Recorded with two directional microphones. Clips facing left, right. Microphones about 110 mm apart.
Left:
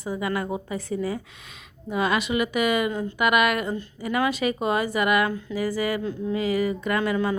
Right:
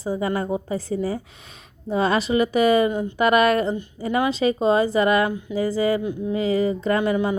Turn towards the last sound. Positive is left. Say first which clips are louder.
# right 3 dB
turn(degrees=-20)  # may be behind; listen again after turning